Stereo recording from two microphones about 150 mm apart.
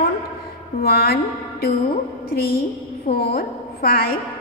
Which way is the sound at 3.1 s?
90° left.